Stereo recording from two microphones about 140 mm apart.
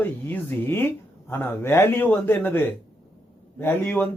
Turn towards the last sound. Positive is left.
turn(degrees=10)  # may be behind; listen again after turning